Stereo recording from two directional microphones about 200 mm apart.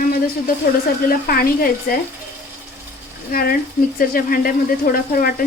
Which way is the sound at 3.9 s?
45° left (ahead or behind).